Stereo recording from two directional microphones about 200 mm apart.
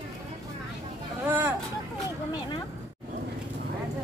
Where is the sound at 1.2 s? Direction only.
10° right (ahead or behind).